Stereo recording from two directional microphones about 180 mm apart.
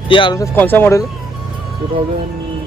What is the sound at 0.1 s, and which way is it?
Speech, 25° left (ahead or behind).